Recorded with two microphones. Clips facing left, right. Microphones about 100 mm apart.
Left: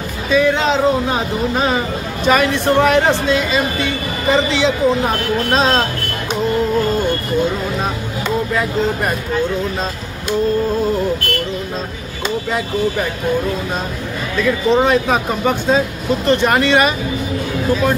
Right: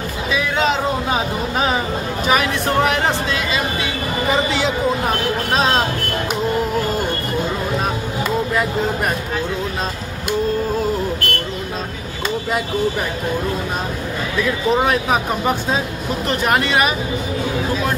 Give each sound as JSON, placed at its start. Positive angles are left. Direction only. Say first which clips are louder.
{"t": 0.3, "sound": "speech", "louder": "left 5 dB", "side_deg": -5}
{"t": 14.4, "sound": "speech", "louder": "left 4 dB", "side_deg": -5}